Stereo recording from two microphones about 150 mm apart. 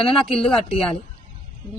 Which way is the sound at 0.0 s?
5° left (ahead or behind).